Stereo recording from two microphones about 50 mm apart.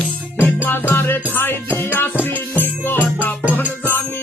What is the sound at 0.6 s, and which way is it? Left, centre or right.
Music, left.